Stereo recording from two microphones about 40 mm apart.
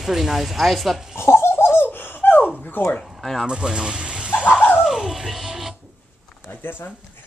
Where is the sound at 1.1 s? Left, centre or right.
Left.